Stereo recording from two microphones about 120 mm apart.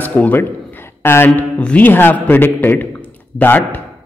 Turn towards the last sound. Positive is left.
turn(degrees=15)  # may be behind; listen again after turning